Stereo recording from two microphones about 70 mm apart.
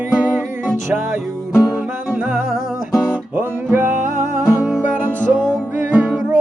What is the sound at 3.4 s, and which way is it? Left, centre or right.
Music, right.